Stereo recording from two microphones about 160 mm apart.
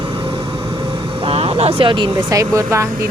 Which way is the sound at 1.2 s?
35° right (ahead or behind).